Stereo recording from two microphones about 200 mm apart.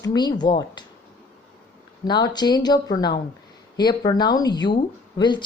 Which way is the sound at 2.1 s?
20° left (ahead or behind).